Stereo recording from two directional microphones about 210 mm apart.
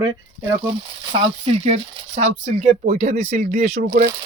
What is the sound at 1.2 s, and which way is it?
Speech, 30° right (ahead or behind).